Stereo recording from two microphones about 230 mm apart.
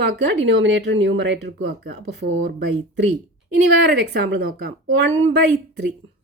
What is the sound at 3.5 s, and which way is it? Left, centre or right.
Speech, right.